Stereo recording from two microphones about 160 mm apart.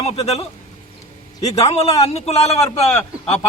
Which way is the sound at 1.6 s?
40° left (ahead or behind).